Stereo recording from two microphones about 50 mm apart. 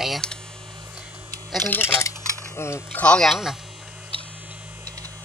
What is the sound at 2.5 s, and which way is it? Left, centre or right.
Speech, left.